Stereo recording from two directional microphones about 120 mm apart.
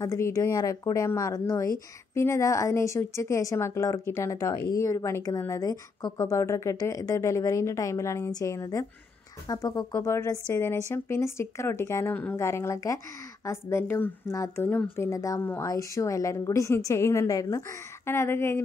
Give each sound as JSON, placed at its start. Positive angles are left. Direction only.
{"t": 0.0, "sound": "speech", "side_deg": 25}